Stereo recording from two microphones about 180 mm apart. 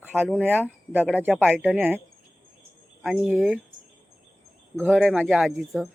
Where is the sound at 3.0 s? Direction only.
Centre (ahead or behind).